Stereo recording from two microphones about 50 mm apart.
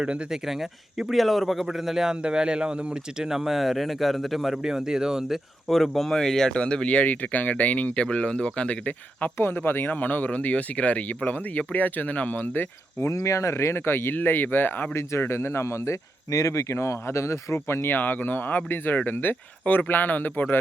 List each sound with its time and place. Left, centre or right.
0.0 s speech: right
0.3 s speech: centre
4.6 s speech: centre
5.6 s speech: centre; by 9.3 s left
9.4 s speech: left
13.1 s speech: left
14.9 s speech: left
17.9 s speech: left